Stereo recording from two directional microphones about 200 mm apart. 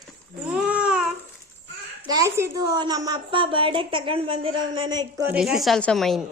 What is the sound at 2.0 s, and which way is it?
A woman's voice, 20° right (ahead or behind).